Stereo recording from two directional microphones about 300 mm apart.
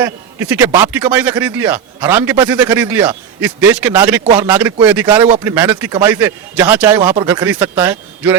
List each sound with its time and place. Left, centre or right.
0.0 s speech: centre